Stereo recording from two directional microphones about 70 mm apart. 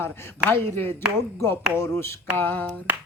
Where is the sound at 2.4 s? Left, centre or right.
Left.